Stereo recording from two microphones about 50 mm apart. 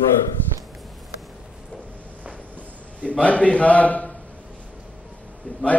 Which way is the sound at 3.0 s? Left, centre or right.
Left.